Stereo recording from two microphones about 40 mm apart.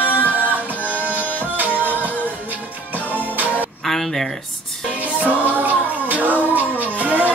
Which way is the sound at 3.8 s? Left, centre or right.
Centre.